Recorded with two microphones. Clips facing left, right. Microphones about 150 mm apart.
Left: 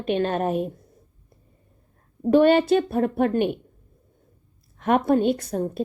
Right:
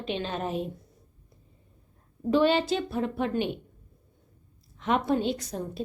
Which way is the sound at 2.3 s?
55° left (ahead or behind).